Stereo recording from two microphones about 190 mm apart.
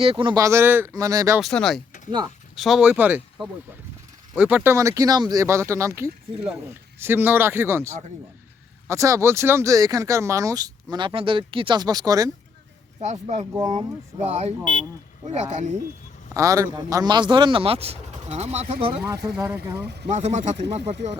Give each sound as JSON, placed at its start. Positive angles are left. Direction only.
{"t": 0.0, "sound": "speech", "side_deg": -30}
{"t": 1.4, "sound": "speech", "side_deg": 0}
{"t": 2.0, "sound": "speech", "side_deg": -25}
{"t": 2.6, "sound": "speech", "side_deg": 0}
{"t": 13.0, "sound": "speech", "side_deg": -35}
{"t": 13.5, "sound": "speech", "side_deg": -20}
{"t": 13.7, "sound": "speech", "side_deg": -35}
{"t": 16.3, "sound": "speech", "side_deg": -15}
{"t": 19.0, "sound": "speech", "side_deg": -15}
{"t": 20.1, "sound": "speech", "side_deg": -40}